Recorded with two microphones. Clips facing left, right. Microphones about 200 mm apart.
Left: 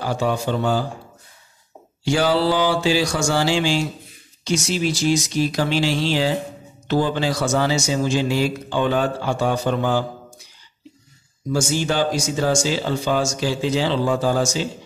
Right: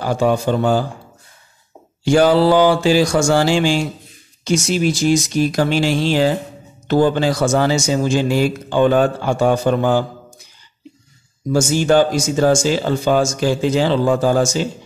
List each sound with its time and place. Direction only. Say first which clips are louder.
0.0 s speech: right 5 dB; 50° right (ahead or behind)
2.0 s speech: right 6 dB; 50° right (ahead or behind)
11.5 s speech: right 7 dB; 50° right (ahead or behind)